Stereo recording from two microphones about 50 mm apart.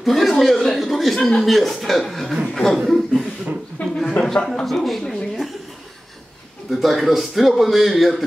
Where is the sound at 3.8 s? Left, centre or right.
Left.